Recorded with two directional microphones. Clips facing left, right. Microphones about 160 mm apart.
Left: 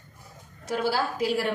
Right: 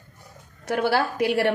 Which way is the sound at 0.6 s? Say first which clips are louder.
Right 4 dB; 65° right (ahead or behind).